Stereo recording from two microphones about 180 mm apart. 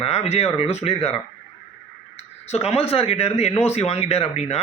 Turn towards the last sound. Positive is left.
turn(degrees=35)  # may be behind; listen again after turning